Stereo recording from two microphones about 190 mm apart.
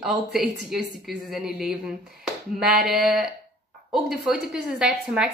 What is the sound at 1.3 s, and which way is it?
A woman's voice, centre (ahead or behind).